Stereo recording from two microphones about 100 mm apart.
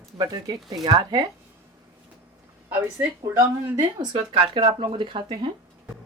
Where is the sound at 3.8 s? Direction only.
45° right (ahead or behind).